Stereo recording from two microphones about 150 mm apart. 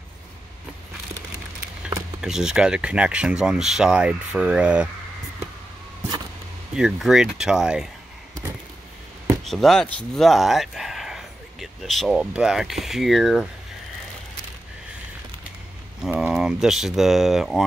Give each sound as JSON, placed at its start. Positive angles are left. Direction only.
{"t": 2.2, "sound": "speech", "side_deg": -5}
{"t": 6.7, "sound": "speech", "side_deg": -5}
{"t": 9.5, "sound": "speech", "side_deg": 0}
{"t": 16.0, "sound": "speech", "side_deg": -5}